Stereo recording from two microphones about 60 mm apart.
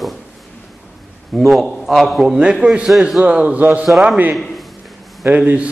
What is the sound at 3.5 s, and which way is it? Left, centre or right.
Speech, right.